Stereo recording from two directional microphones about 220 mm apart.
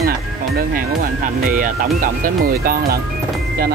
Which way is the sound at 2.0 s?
40° right (ahead or behind).